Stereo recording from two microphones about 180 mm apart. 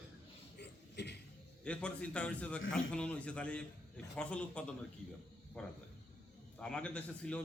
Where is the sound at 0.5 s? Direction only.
70° left (ahead or behind).